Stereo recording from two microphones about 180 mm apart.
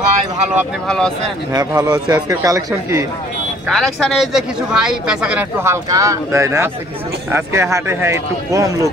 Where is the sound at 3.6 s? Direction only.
Centre (ahead or behind); by 8.9 s 20° right (ahead or behind).